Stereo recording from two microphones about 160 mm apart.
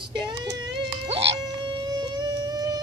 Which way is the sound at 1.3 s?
25° right (ahead or behind).